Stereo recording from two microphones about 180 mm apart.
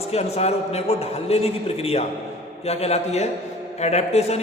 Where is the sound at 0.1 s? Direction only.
35° left (ahead or behind).